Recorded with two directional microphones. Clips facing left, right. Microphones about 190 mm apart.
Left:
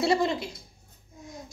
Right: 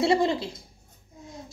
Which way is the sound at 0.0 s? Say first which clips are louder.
Right 2 dB; 25° right (ahead or behind).